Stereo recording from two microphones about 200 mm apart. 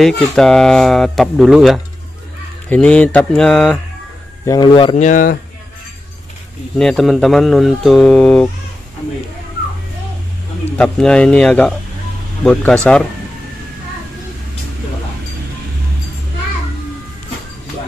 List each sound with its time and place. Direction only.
0.0 s speech: 5° left (ahead or behind)
4.5 s speech: 25° left (ahead or behind); by 5.4 s 45° left (ahead or behind)
6.8 s speech: centre (ahead or behind)
10.8 s speech: 5° left (ahead or behind)